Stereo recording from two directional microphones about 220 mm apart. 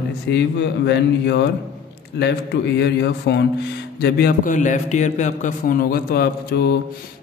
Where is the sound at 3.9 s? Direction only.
45° left (ahead or behind).